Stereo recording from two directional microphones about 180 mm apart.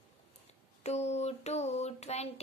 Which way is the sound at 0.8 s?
40° left (ahead or behind).